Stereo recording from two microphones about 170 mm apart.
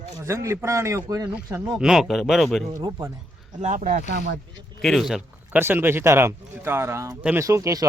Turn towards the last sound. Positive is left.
turn(degrees=-20)  # may be behind; listen again after turning